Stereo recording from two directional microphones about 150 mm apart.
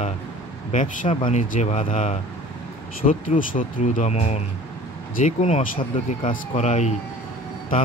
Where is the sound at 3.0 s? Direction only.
65° left (ahead or behind).